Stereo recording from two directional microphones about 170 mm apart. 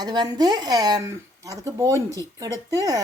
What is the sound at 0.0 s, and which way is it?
Speech, 25° right (ahead or behind).